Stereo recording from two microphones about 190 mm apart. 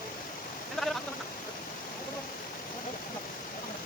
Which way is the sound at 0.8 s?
Centre (ahead or behind).